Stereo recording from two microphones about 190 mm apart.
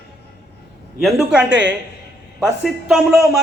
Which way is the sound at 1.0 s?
Centre (ahead or behind).